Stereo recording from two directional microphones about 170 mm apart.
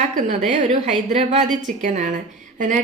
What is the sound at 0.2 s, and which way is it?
A woman's voice, 45° right (ahead or behind).